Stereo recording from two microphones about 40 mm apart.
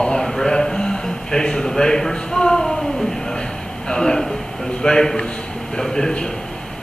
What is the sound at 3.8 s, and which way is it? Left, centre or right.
A man's voice, left.